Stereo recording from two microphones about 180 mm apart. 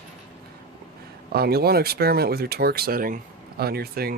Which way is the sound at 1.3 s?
60° right (ahead or behind).